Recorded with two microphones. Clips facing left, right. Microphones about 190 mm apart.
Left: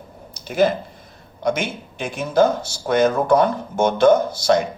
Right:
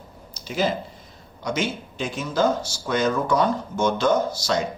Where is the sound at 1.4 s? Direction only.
55° left (ahead or behind).